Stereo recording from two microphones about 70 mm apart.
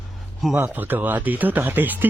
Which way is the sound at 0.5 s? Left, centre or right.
Right.